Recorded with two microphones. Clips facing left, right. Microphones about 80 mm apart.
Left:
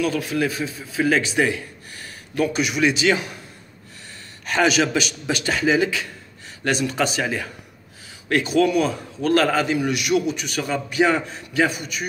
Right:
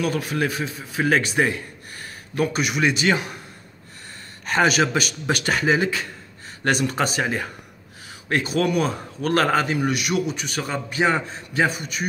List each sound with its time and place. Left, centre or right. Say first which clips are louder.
0.0 s a man's voice: left 1 dB; right
4.5 s a man's voice: even; right